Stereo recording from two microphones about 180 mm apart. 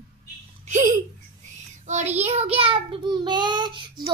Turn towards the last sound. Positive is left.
turn(degrees=-25)  # may be behind; listen again after turning